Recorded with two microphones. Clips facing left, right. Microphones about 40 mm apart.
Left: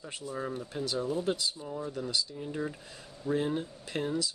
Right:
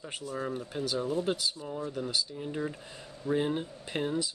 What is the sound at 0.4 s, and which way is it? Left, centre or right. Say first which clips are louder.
Speech: right 1 dB; centre.